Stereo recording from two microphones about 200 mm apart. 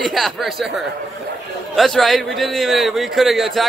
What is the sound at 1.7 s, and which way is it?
A man's voice, centre (ahead or behind).